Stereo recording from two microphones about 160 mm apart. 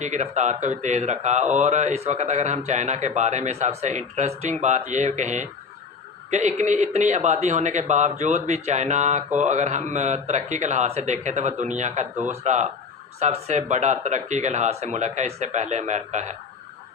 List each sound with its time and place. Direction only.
0.0 s speech: 45° right (ahead or behind)